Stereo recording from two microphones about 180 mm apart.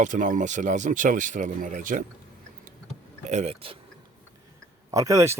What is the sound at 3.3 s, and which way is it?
Speech, 40° right (ahead or behind).